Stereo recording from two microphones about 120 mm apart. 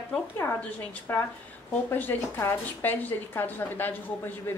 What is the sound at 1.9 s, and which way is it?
Speech, 15° left (ahead or behind).